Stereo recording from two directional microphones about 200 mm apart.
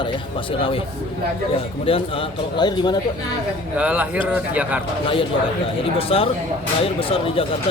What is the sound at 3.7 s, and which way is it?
Speech, 10° right (ahead or behind).